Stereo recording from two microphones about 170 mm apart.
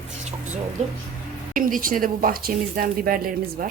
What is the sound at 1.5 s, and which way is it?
Speech, 55° right (ahead or behind).